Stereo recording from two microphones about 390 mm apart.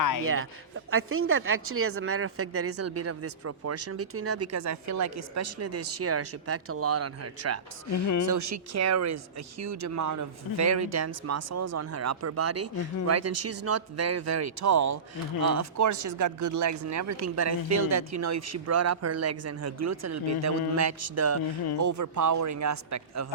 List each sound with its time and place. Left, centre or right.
0.9 s speech: right
7.9 s speech: left
8.3 s speech: right